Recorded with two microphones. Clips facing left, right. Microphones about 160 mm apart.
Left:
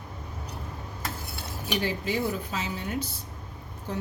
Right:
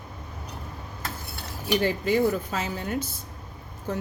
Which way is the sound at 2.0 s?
50° right (ahead or behind).